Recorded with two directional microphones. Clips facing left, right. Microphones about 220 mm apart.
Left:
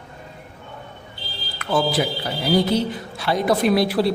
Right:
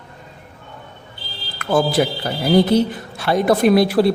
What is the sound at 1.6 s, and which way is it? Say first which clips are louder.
Speech: right 4 dB; 50° right (ahead or behind).